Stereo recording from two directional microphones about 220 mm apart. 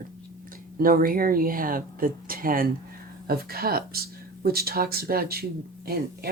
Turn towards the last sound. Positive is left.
turn(degrees=-45)  # may be behind; listen again after turning